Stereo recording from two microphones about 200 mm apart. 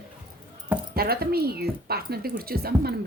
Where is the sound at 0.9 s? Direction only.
50° right (ahead or behind).